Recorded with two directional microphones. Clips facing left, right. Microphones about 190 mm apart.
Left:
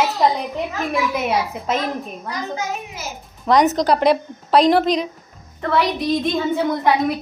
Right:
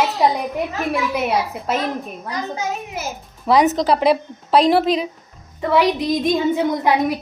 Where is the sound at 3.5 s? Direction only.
5° right (ahead or behind).